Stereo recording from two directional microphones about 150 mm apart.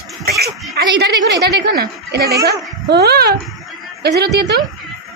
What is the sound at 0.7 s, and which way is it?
A woman's voice, 90° right.